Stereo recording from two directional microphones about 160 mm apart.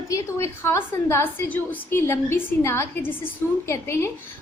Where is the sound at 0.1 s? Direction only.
15° left (ahead or behind).